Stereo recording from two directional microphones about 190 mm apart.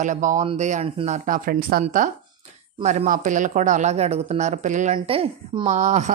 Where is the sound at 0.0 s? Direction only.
40° right (ahead or behind).